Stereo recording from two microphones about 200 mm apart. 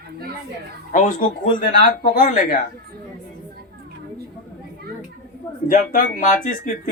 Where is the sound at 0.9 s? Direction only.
40° left (ahead or behind).